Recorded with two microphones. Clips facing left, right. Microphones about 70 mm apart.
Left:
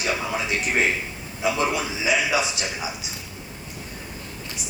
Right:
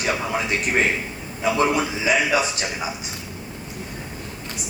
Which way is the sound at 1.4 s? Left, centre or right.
Right.